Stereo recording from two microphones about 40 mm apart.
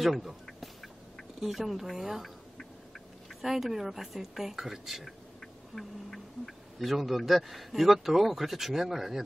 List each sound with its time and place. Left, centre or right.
0.0 s speech: centre
1.4 s speech: centre
3.3 s speech: centre
5.8 s speech: centre